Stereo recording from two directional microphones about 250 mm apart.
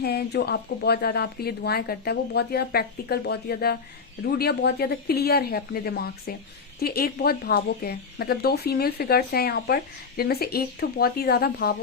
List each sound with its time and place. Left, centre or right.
0.0 s speech: left